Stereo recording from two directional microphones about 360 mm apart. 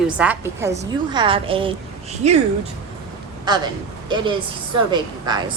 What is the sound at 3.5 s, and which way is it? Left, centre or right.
Speech, centre.